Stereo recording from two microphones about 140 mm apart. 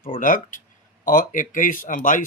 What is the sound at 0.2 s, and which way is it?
Speech, 70° left (ahead or behind).